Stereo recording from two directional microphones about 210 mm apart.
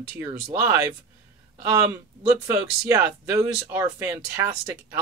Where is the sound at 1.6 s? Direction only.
10° right (ahead or behind).